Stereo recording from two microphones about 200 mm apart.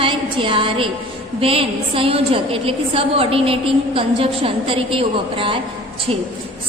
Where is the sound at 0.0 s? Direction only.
25° right (ahead or behind).